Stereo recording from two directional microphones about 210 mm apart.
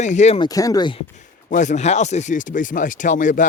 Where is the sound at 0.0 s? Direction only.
35° left (ahead or behind).